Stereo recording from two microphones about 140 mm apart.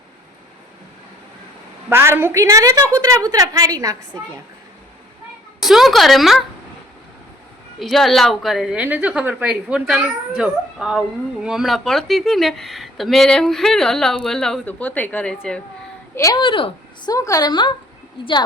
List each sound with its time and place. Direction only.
1.9 s a woman's voice: 15° right (ahead or behind)
5.5 s a woman's voice: centre (ahead or behind)
7.8 s a woman's voice: centre (ahead or behind)
16.1 s a woman's voice: 20° left (ahead or behind)
16.4 s speech: 40° left (ahead or behind)
17.2 s a woman's voice: 25° left (ahead or behind)